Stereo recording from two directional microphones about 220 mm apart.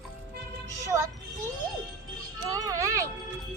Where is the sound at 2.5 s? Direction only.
15° right (ahead or behind).